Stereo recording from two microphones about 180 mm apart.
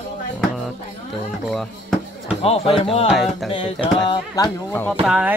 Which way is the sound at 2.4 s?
30° left (ahead or behind).